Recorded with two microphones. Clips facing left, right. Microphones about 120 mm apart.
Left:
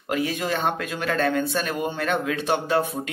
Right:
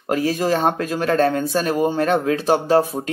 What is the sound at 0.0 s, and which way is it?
Speech, 40° right (ahead or behind).